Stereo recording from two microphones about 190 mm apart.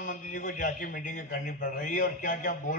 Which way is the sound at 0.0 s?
45° left (ahead or behind).